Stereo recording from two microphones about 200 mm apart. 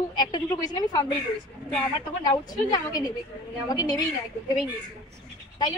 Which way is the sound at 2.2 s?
20° left (ahead or behind).